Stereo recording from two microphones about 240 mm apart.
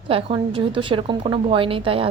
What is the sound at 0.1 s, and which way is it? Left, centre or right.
A woman's voice, right.